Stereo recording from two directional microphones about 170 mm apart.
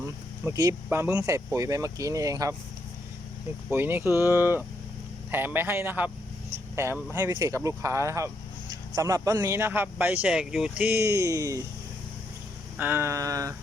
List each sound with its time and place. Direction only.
0.4 s speech: 20° right (ahead or behind)
3.7 s speech: 10° right (ahead or behind)
12.8 s speech: 15° right (ahead or behind)